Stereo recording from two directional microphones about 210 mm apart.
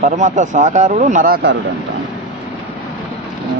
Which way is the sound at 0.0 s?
35° right (ahead or behind).